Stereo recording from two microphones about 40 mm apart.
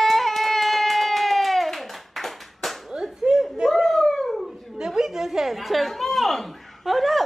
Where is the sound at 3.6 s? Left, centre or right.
Centre.